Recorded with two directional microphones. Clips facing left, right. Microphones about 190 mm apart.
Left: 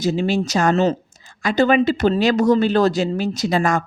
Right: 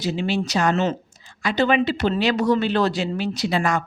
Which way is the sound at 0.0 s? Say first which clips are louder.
Left 4 dB; 45° left (ahead or behind).